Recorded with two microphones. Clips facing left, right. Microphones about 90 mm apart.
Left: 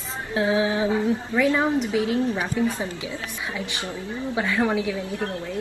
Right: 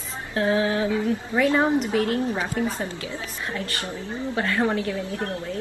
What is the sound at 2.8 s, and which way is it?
A woman's voice, 20° left (ahead or behind).